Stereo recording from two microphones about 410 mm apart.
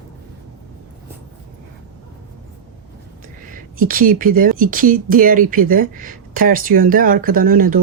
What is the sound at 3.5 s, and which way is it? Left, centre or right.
Speech, centre.